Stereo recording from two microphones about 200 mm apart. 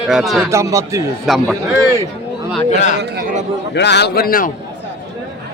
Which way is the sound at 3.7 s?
60° left (ahead or behind).